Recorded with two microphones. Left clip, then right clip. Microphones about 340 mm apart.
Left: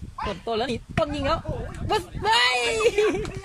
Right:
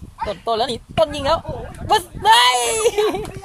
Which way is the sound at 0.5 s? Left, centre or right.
Centre.